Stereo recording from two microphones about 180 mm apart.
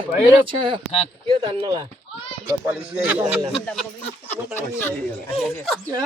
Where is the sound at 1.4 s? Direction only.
30° right (ahead or behind).